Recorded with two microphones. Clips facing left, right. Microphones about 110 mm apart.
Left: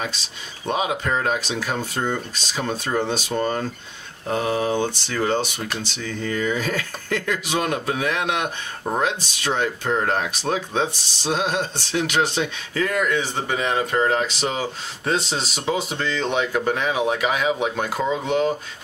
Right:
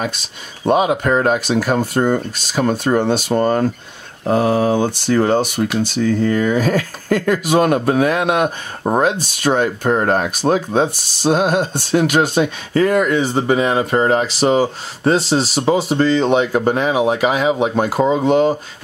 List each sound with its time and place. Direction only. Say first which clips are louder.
0.0 s speech: right 6 dB; 55° right (ahead or behind); by 18.6 s 35° right (ahead or behind)